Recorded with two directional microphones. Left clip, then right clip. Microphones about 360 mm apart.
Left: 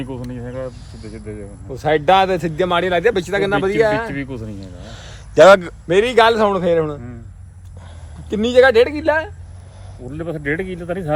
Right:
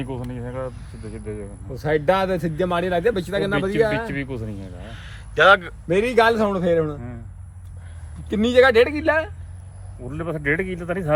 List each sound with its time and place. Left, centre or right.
0.0 s speech: centre
1.7 s a man's voice: centre
4.0 s speech: centre
4.8 s a man's voice: centre
8.3 s speech: centre